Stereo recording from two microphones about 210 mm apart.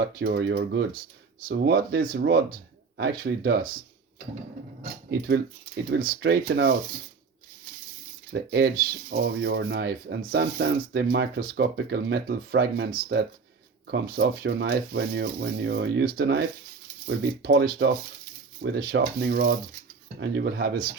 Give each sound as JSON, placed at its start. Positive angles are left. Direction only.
{"t": 0.2, "sound": "speech", "side_deg": -50}
{"t": 4.8, "sound": "speech", "side_deg": -50}
{"t": 8.3, "sound": "speech", "side_deg": -50}